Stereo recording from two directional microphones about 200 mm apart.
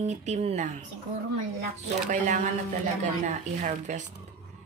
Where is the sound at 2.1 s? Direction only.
40° right (ahead or behind).